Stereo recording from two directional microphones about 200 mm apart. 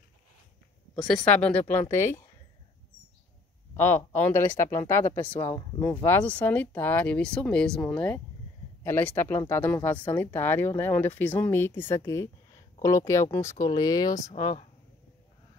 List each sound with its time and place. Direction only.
0.9 s speech: centre (ahead or behind)
3.7 s speech: 10° left (ahead or behind); by 14.7 s 25° left (ahead or behind)